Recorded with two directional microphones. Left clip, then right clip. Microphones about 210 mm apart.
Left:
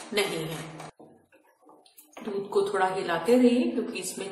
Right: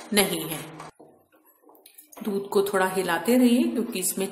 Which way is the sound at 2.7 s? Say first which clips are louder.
Right 2 dB; 50° right (ahead or behind).